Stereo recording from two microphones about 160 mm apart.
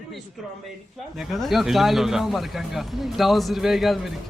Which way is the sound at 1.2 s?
Centre (ahead or behind).